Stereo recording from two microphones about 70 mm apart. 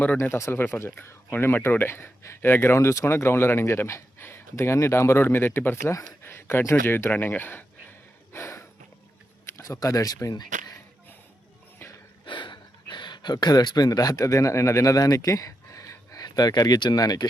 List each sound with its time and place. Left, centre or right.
0.2 s speech: left
6.2 s a sound: left
9.5 s speech: left
12.9 s speech: left